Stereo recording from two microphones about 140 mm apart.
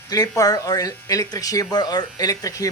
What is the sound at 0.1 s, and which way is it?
Speech, 25° left (ahead or behind).